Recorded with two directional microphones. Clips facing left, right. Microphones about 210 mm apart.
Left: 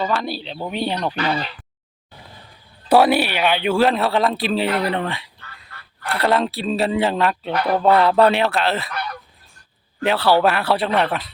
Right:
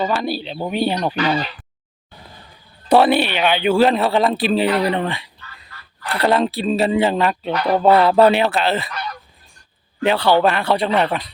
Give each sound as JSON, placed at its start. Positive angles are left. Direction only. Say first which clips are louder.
{"t": 0.1, "sound": "speech", "louder": "right 2 dB", "side_deg": -5}
{"t": 2.9, "sound": "speech", "louder": "right 1 dB", "side_deg": 5}
{"t": 5.6, "sound": "a sound", "louder": "even", "side_deg": 55}
{"t": 6.1, "sound": "speech", "louder": "right 2 dB", "side_deg": 0}
{"t": 10.0, "sound": "speech", "louder": "right 1 dB", "side_deg": 0}